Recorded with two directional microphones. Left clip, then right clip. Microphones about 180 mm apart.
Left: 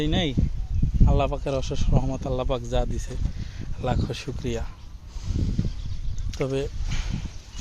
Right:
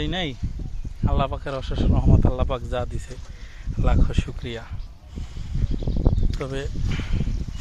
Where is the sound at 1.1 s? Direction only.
25° left (ahead or behind).